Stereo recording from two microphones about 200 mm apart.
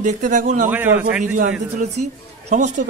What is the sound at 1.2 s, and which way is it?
Speech, 40° right (ahead or behind).